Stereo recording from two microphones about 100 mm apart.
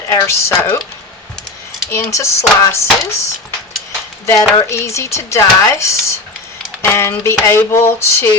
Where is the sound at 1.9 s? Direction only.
30° left (ahead or behind).